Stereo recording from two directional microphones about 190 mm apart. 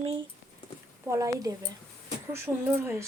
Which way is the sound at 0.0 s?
30° right (ahead or behind).